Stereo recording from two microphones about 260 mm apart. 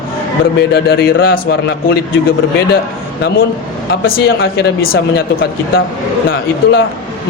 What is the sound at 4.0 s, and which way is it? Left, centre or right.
Speech, left.